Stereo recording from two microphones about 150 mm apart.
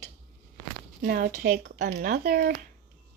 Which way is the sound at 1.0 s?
75° right (ahead or behind).